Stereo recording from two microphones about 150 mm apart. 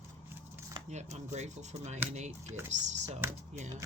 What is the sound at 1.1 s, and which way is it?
Speech, 50° right (ahead or behind).